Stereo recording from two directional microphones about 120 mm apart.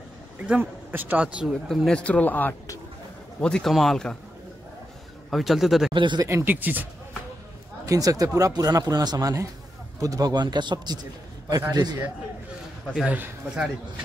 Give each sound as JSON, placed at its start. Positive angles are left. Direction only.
{"t": 0.4, "sound": "speech", "side_deg": -15}
{"t": 1.7, "sound": "speech", "side_deg": 5}
{"t": 5.3, "sound": "a man's voice", "side_deg": 0}
{"t": 5.9, "sound": "speech", "side_deg": -40}
{"t": 6.2, "sound": "speech", "side_deg": -20}
{"t": 7.8, "sound": "speech", "side_deg": -30}
{"t": 12.9, "sound": "speech", "side_deg": -5}